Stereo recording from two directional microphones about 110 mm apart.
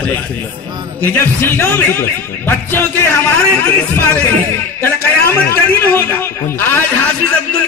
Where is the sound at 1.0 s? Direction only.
20° left (ahead or behind).